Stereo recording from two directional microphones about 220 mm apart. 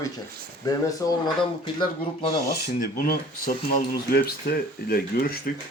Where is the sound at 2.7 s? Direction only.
40° left (ahead or behind).